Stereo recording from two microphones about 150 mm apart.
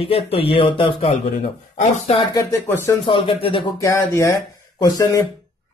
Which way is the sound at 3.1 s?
35° left (ahead or behind).